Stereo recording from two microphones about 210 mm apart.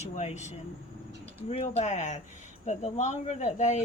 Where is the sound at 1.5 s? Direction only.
30° left (ahead or behind).